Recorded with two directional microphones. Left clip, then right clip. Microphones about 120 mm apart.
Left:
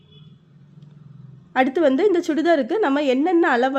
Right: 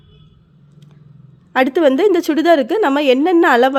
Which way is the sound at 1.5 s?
35° right (ahead or behind).